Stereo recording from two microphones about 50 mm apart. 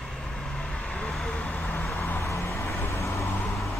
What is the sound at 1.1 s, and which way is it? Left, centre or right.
Vehicle, centre.